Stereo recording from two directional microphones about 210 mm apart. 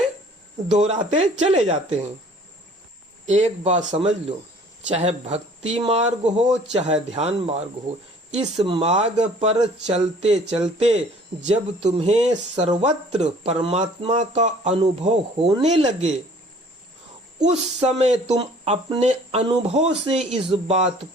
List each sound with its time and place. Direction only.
0.7 s speech: 30° right (ahead or behind)
3.2 s speech: 30° right (ahead or behind)
17.4 s speech: 30° right (ahead or behind)